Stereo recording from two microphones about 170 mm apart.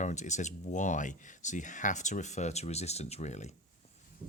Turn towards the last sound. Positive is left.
turn(degrees=40)  # may be behind; listen again after turning